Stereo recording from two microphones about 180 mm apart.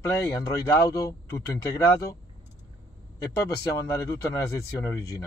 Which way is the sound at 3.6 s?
20° left (ahead or behind).